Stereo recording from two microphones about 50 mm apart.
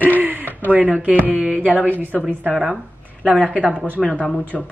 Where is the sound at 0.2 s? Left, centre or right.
Right.